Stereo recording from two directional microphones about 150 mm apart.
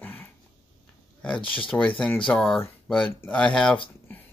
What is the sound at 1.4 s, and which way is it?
Speech, 35° left (ahead or behind).